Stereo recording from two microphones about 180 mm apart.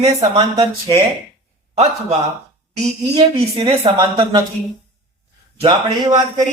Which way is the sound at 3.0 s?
25° right (ahead or behind).